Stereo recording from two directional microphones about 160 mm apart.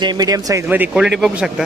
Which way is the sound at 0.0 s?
25° right (ahead or behind).